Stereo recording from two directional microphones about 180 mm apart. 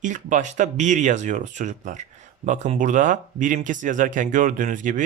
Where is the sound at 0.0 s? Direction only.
45° right (ahead or behind).